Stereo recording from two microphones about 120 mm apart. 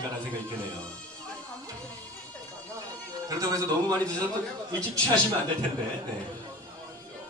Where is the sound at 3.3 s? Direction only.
30° right (ahead or behind).